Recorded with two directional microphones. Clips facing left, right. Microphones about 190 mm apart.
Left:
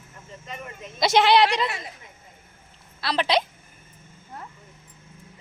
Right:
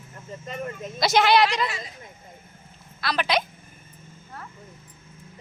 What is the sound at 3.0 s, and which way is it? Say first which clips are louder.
Speech: left 2 dB; 30° left (ahead or behind).